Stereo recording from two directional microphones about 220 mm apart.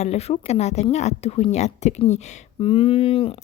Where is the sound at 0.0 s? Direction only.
30° left (ahead or behind).